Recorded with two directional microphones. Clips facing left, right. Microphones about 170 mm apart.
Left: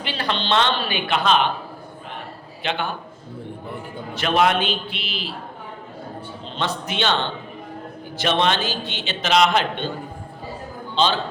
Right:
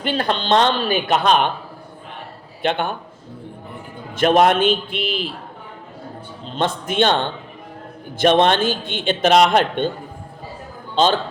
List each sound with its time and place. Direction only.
0.0 s a man's voice: 50° right (ahead or behind)
2.6 s a man's voice: 50° right (ahead or behind)
4.1 s a man's voice: 45° right (ahead or behind)
6.4 s a man's voice: 45° right (ahead or behind)
8.2 s a man's voice: 50° right (ahead or behind)
10.9 s a man's voice: 45° right (ahead or behind)